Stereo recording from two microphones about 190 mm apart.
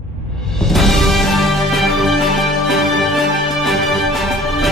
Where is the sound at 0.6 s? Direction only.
Centre (ahead or behind).